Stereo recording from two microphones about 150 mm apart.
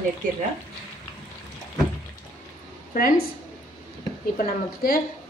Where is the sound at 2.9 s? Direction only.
70° left (ahead or behind).